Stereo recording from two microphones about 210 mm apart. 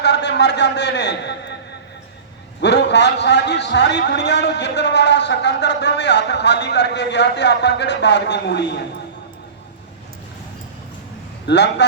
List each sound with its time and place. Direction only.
0.0 s a man's voice: 55° left (ahead or behind)
2.6 s a man's voice: 55° left (ahead or behind)
11.4 s a man's voice: 55° left (ahead or behind)